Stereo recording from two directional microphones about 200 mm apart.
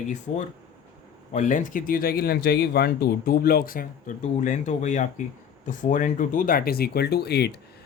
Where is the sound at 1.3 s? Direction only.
40° left (ahead or behind).